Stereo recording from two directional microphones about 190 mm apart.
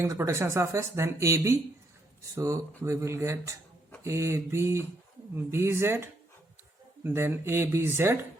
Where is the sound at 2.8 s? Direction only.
15° right (ahead or behind).